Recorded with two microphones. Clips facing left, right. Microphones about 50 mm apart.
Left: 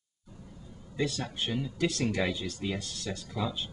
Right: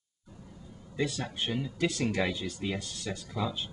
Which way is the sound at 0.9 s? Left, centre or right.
Centre.